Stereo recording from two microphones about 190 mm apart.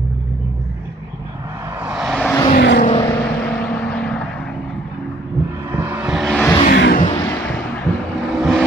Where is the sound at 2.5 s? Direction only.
60° left (ahead or behind).